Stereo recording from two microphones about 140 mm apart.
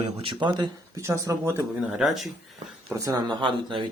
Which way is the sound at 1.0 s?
20° right (ahead or behind).